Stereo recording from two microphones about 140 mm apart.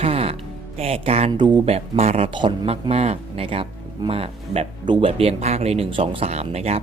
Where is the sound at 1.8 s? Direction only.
50° right (ahead or behind).